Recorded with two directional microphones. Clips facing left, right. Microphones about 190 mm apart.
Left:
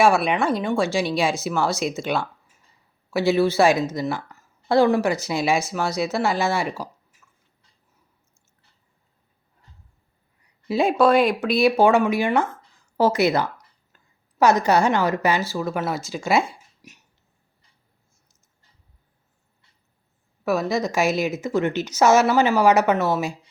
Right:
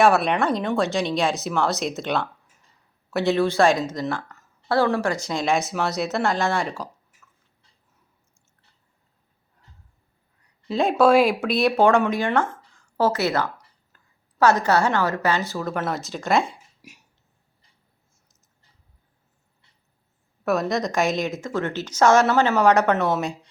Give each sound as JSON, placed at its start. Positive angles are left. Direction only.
{"t": 0.0, "sound": "speech", "side_deg": 0}
{"t": 10.7, "sound": "speech", "side_deg": 5}
{"t": 16.4, "sound": "a sound", "side_deg": -10}
{"t": 20.4, "sound": "a woman's voice", "side_deg": 0}